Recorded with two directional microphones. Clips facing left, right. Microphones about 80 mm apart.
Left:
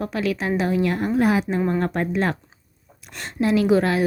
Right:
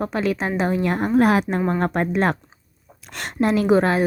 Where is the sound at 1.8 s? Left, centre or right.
Right.